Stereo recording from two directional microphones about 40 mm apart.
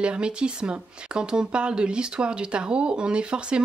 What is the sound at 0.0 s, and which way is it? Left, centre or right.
Speech, right.